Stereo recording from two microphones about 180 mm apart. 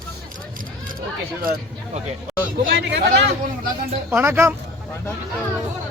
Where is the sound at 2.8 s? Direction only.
70° right (ahead or behind).